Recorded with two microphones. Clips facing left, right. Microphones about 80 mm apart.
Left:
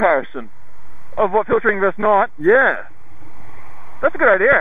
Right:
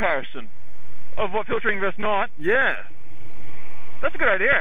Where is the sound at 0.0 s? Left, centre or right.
Left.